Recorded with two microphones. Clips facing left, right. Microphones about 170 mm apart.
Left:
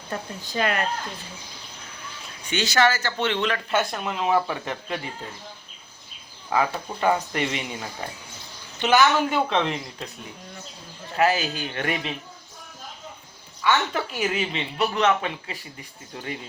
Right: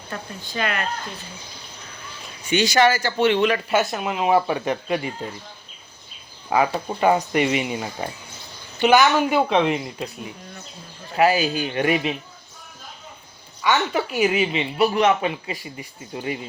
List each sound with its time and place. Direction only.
0.4 s speech: 35° left (ahead or behind)
2.5 s a woman's voice: 15° right (ahead or behind)
7.0 s a woman's voice: 15° right (ahead or behind)
11.2 s a woman's voice: 10° right (ahead or behind)
13.6 s a woman's voice: 10° right (ahead or behind)